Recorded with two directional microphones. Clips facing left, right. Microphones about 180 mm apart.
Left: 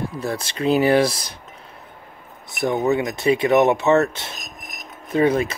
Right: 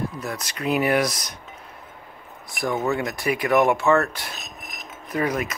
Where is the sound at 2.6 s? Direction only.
20° left (ahead or behind).